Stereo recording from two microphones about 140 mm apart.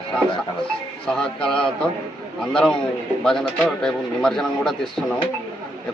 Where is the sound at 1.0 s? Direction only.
5° left (ahead or behind).